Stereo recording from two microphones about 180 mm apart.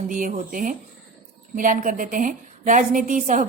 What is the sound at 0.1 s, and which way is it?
A woman's voice, 45° right (ahead or behind).